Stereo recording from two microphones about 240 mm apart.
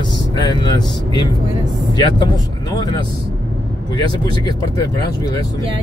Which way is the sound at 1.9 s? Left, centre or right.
Centre.